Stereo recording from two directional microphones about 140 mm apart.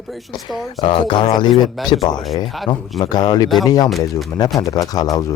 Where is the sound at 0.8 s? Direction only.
40° left (ahead or behind).